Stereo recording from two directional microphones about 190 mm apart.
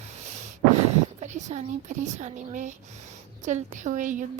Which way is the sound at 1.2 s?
40° right (ahead or behind).